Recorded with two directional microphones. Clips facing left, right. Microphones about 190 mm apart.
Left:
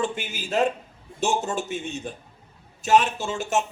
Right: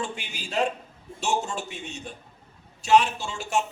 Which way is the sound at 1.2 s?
50° left (ahead or behind).